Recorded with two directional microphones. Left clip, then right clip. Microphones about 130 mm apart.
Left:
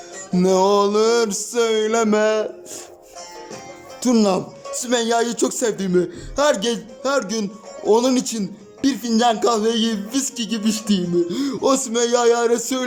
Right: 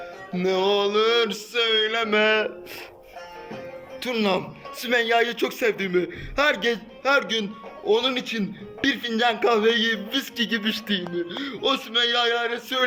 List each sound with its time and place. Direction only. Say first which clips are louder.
0.3 s a man's voice: left 6 dB; 40° left (ahead or behind)
4.0 s a man's voice: left 5 dB; 40° left (ahead or behind)
11.1 s music: left 8 dB; 45° left (ahead or behind)